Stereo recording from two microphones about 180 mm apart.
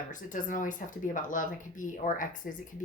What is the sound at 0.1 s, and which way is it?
Speech, 45° left (ahead or behind).